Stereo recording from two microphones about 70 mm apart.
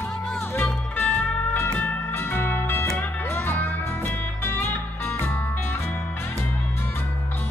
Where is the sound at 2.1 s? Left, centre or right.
Left.